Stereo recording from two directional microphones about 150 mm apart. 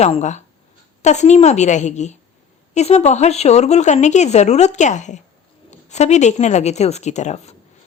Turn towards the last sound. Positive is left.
turn(degrees=50)  # may be behind; listen again after turning